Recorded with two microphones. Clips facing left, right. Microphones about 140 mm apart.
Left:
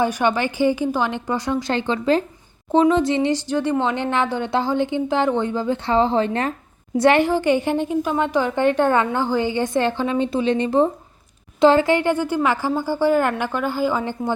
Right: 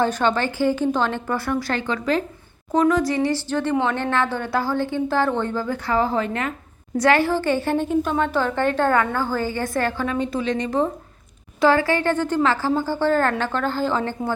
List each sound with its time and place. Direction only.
0.0 s a woman's voice: 15° left (ahead or behind)